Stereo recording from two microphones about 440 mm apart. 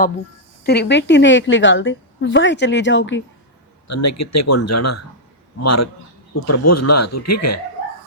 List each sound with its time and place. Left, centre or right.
0.6 s a woman's voice: left
3.8 s speech: left